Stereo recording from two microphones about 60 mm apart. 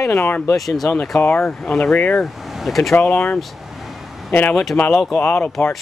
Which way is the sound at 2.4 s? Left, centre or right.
Centre.